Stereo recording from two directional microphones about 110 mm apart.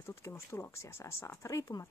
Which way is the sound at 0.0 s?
25° left (ahead or behind).